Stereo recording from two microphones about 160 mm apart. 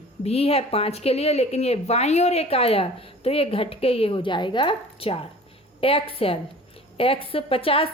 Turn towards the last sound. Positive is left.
turn(degrees=35)  # may be behind; listen again after turning